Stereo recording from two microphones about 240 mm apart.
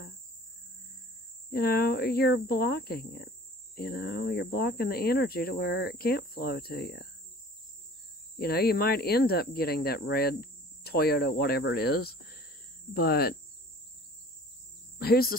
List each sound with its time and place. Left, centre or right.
1.5 s speech: left
8.4 s speech: left
15.0 s cricket: left